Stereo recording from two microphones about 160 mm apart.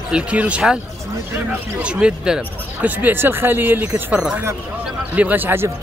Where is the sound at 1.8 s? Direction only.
5° right (ahead or behind).